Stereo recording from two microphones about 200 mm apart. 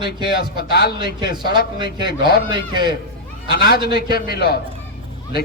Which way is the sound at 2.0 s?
50° left (ahead or behind).